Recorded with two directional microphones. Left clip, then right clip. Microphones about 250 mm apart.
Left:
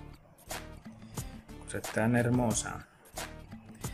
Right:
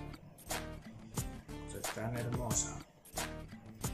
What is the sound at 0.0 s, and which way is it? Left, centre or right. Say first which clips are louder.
Music: right 3 dB; centre.